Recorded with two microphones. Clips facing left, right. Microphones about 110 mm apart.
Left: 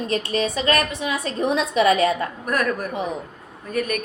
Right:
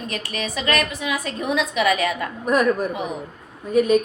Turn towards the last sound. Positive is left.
turn(degrees=-20)  # may be behind; listen again after turning